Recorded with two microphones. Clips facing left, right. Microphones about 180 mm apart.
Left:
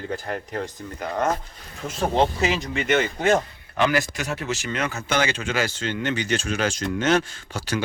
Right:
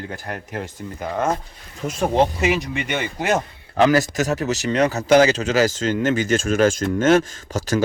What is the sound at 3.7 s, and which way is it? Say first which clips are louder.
Speech: right 6 dB; 40° right (ahead or behind).